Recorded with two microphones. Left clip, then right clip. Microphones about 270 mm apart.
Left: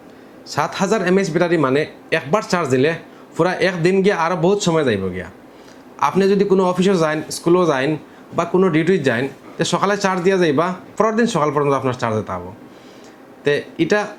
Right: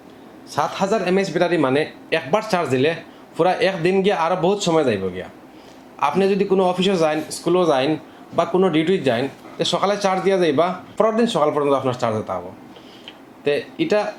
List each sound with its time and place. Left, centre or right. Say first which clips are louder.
0.5 s a man's voice: left 1 dB; left
13.4 s speech: left 2 dB; left